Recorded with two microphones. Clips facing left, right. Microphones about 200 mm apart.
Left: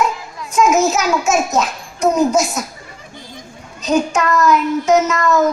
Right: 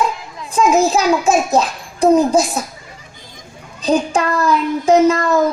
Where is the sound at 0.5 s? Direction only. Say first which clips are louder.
Right 1 dB; 30° right (ahead or behind).